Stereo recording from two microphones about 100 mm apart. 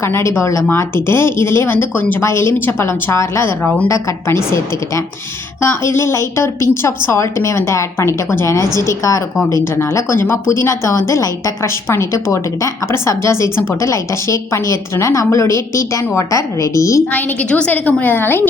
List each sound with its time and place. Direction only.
0.0 s a woman's voice: 25° left (ahead or behind)
5.5 s a woman's voice: 25° left (ahead or behind)
17.1 s a woman's voice: 15° left (ahead or behind)